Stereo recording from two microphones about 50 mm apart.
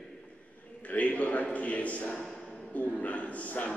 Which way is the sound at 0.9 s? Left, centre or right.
Left.